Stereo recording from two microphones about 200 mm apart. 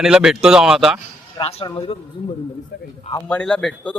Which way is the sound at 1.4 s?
30° left (ahead or behind).